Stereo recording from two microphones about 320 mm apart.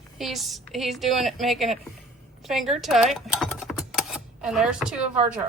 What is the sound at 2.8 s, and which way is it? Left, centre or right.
Typing, centre.